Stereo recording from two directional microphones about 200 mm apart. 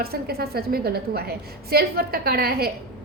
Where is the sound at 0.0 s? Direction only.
50° right (ahead or behind).